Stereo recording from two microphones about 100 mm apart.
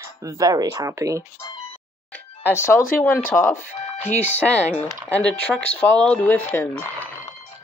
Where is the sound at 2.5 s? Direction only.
25° left (ahead or behind).